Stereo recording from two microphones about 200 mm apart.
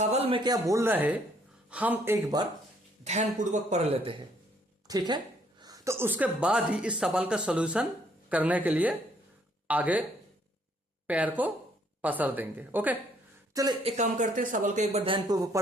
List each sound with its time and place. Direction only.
0.0 s a man's voice: 30° right (ahead or behind); by 2.1 s 10° right (ahead or behind)
3.0 s a woman's voice: 35° right (ahead or behind); by 10.0 s 10° right (ahead or behind)
11.0 s speech: 5° right (ahead or behind)
13.8 s speech: 35° right (ahead or behind); by 15.6 s 20° right (ahead or behind)